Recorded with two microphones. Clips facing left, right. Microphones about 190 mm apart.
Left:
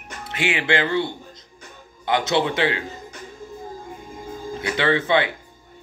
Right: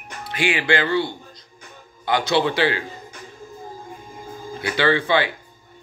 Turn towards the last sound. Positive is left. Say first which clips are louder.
# even
turn(degrees=25)  # may be behind; listen again after turning